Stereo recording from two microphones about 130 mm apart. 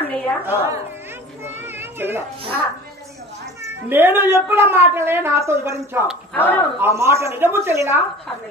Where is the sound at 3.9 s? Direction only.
15° right (ahead or behind).